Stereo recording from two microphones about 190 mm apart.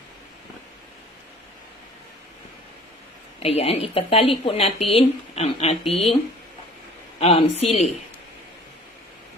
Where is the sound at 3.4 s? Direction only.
30° left (ahead or behind).